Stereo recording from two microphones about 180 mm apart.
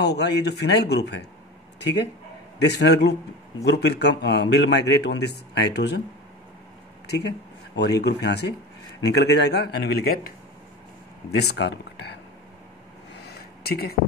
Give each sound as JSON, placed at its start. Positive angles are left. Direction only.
{"t": 0.0, "sound": "a man's voice", "side_deg": 65}
{"t": 2.6, "sound": "a man's voice", "side_deg": 70}
{"t": 7.7, "sound": "a man's voice", "side_deg": 65}
{"t": 11.3, "sound": "a man's voice", "side_deg": 70}
{"t": 13.2, "sound": "a sound", "side_deg": 60}